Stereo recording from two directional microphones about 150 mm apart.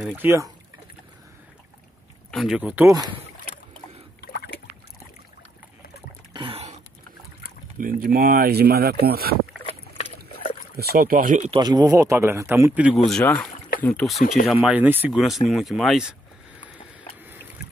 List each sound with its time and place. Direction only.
0.1 s speech: 15° right (ahead or behind)
2.3 s speech: 5° right (ahead or behind)
2.9 s a man's voice: 25° right (ahead or behind)
6.3 s a sound: 40° right (ahead or behind)
7.8 s speech: 70° right (ahead or behind); by 9.4 s 90° right
9.7 s boat: 45° left (ahead or behind)
10.8 s speech: 80° right; by 11.5 s 60° right (ahead or behind)
11.5 s a man's voice: 25° right (ahead or behind)
12.9 s speech: centre (ahead or behind)
14.4 s speech: 10° right (ahead or behind)
15.1 s speech: centre (ahead or behind)